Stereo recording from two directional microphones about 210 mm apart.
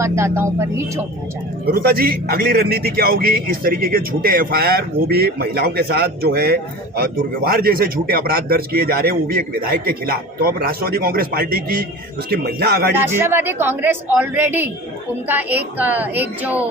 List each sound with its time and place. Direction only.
0.0 s a woman's voice: 15° right (ahead or behind)
1.6 s a man's voice: 45° right (ahead or behind)
13.0 s a woman's voice: 10° right (ahead or behind)